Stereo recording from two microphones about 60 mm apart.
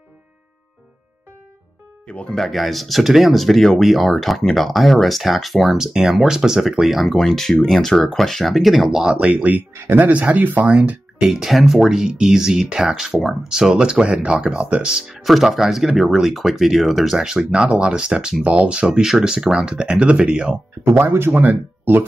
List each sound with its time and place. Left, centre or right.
2.0 s speech: centre
2.3 s speech: centre
9.2 s speech: right
11.1 s speech: centre
14.6 s speech: right
14.9 s speech: centre
20.8 s speech: right
21.3 s speech: right